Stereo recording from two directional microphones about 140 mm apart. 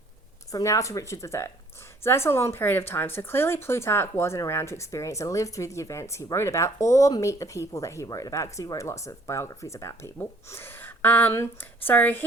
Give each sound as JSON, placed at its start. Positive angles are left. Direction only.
{"t": 0.5, "sound": "speech", "side_deg": 20}